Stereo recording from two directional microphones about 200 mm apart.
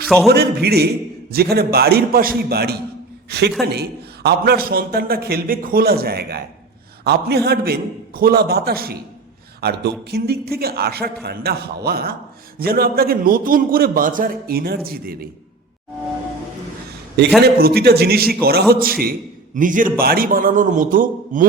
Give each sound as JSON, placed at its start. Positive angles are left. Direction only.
{"t": 0.3, "sound": "a man's voice", "side_deg": -55}
{"t": 17.4, "sound": "a man's voice", "side_deg": -55}